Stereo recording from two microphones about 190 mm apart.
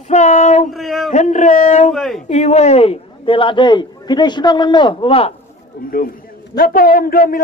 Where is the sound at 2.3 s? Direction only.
35° left (ahead or behind).